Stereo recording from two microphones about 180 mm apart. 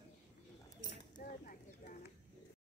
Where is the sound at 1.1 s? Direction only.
50° left (ahead or behind).